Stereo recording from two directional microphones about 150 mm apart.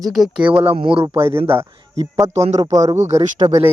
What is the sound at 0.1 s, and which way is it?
Speech, 5° right (ahead or behind).